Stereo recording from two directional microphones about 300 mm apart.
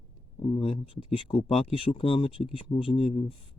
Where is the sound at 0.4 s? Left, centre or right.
Centre.